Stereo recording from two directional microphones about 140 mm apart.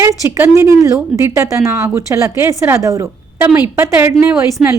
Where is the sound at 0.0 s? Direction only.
20° right (ahead or behind).